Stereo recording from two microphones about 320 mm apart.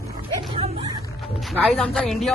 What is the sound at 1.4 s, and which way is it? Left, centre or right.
Speech, centre.